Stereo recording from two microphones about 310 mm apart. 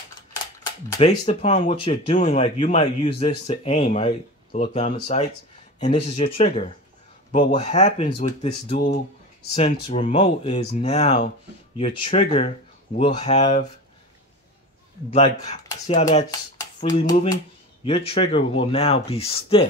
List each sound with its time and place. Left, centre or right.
0.9 s speech: centre
15.0 s speech: centre